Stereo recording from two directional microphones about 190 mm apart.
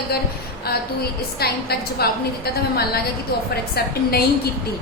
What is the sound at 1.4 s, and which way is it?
A woman's voice, 55° left (ahead or behind).